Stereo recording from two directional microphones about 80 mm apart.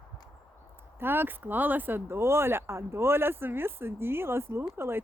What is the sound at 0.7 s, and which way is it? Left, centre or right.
Speech, right.